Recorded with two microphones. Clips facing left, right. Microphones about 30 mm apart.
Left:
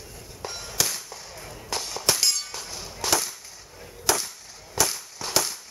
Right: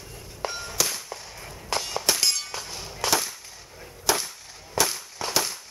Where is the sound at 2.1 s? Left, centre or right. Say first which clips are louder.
Left 2 dB; centre.